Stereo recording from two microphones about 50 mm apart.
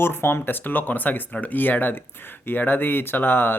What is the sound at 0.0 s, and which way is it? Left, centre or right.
Speech, left.